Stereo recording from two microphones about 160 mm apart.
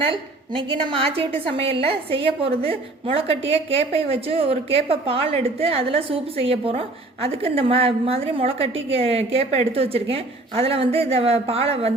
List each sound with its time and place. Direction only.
0.1 s a woman's voice: 30° right (ahead or behind)